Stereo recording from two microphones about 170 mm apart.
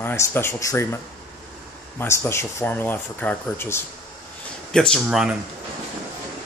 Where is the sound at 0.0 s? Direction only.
15° left (ahead or behind).